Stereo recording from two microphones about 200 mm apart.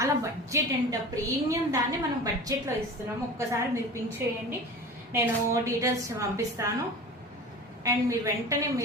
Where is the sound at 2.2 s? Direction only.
15° right (ahead or behind).